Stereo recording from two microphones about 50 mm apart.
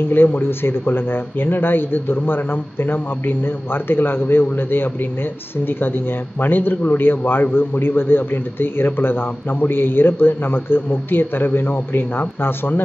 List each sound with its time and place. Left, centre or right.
0.1 s speech: left